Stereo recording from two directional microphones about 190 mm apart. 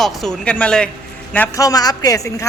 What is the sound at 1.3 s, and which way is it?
A man's voice, 15° left (ahead or behind).